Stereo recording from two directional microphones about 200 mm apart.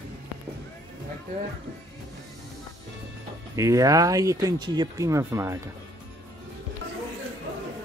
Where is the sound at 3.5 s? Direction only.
15° right (ahead or behind).